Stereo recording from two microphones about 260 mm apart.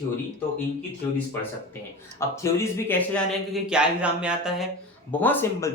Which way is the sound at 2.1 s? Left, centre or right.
Centre.